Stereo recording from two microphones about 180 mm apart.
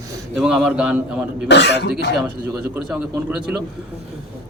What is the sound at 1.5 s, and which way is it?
Speech, 75° left (ahead or behind).